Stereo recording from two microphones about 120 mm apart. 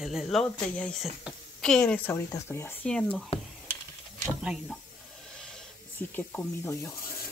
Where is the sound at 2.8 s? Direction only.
5° left (ahead or behind).